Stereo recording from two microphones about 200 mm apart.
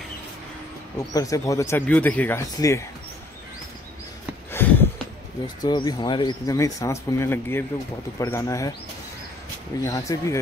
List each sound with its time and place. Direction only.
0.9 s speech: 15° left (ahead or behind)
4.5 s a sound: 10° left (ahead or behind)
5.6 s speech: 20° left (ahead or behind)
9.8 s speech: 15° left (ahead or behind)